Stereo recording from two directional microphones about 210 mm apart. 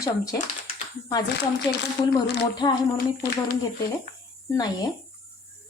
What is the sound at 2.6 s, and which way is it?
Speech, 20° left (ahead or behind).